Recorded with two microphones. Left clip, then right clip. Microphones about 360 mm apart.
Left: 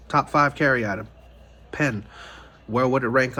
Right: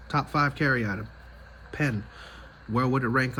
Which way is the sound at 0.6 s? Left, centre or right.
Centre.